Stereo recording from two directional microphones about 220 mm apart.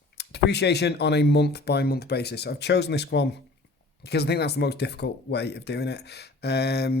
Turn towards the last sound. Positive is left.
turn(degrees=50)  # may be behind; listen again after turning